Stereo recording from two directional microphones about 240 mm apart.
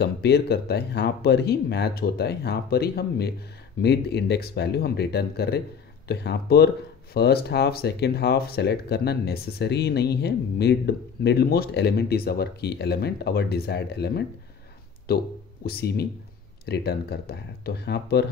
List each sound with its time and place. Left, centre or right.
0.0 s speech: left